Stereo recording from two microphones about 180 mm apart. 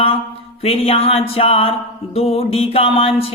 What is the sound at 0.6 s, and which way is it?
Mantra, 35° left (ahead or behind).